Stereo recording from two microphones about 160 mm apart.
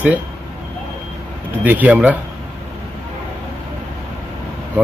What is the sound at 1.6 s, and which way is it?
Speech, 10° right (ahead or behind).